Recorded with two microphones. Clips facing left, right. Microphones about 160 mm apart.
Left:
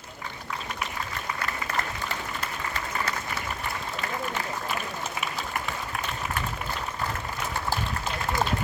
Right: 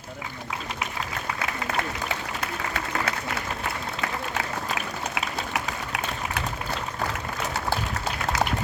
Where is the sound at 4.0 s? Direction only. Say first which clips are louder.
Right 1 dB; 80° right.